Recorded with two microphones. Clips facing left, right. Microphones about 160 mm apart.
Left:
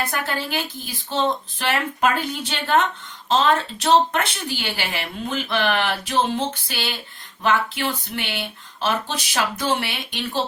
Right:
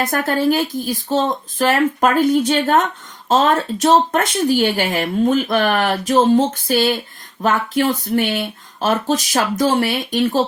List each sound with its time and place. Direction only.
0.0 s speech: 45° right (ahead or behind)